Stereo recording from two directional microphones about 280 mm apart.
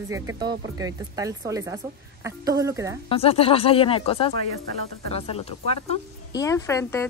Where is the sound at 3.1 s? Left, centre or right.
Left.